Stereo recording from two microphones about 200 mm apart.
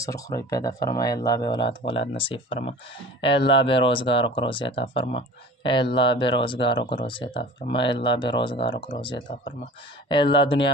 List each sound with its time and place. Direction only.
0.0 s speech: 15° left (ahead or behind)